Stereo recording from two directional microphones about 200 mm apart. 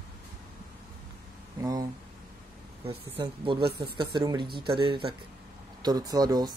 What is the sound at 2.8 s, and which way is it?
Speech, 25° right (ahead or behind).